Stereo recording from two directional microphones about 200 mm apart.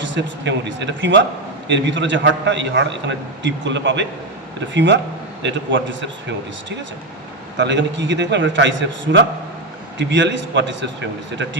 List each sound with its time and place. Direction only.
0.0 s a man's voice: 65° right (ahead or behind)
7.6 s a man's voice: 65° right (ahead or behind)